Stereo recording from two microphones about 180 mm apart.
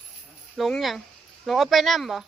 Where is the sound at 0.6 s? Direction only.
Centre (ahead or behind).